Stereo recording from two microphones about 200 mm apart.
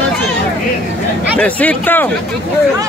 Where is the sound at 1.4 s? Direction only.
5° left (ahead or behind).